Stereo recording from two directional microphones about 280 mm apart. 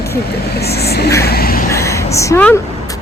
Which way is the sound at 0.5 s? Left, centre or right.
Left.